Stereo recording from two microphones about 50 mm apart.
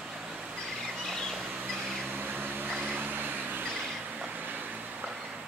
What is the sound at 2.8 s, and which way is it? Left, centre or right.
Vehicle, right.